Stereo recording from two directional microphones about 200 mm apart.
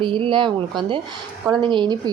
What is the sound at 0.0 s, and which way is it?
A woman's voice, 25° right (ahead or behind).